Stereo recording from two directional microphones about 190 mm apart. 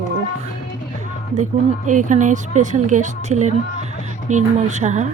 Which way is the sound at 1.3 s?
40° right (ahead or behind).